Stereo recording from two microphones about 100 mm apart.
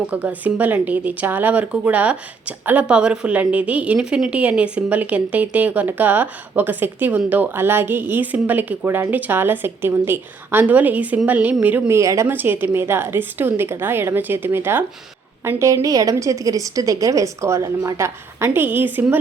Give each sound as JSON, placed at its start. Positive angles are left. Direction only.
{"t": 0.1, "sound": "a woman's voice", "side_deg": -15}
{"t": 11.9, "sound": "a woman's voice", "side_deg": -30}
{"t": 12.3, "sound": "a woman's voice", "side_deg": -20}